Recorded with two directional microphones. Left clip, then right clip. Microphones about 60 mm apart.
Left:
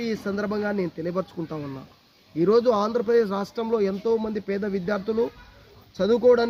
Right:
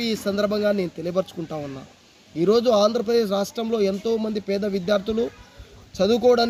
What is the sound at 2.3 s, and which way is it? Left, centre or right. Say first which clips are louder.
A man's voice: right 2 dB; left.